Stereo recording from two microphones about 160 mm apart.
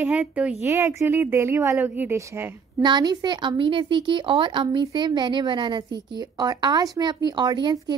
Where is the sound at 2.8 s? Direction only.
25° right (ahead or behind).